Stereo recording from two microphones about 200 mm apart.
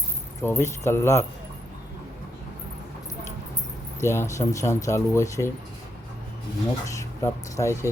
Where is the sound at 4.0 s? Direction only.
15° left (ahead or behind).